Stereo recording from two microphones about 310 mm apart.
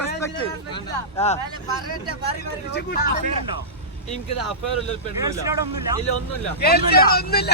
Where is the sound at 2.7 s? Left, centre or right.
Left.